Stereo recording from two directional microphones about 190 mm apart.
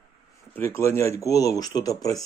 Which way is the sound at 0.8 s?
15° left (ahead or behind).